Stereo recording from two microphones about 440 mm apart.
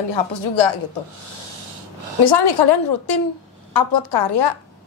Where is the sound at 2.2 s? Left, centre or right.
Left.